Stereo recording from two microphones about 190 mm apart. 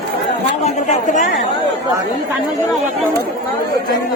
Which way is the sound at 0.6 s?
40° left (ahead or behind).